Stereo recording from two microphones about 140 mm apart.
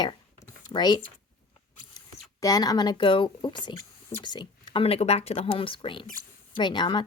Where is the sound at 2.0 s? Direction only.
25° left (ahead or behind).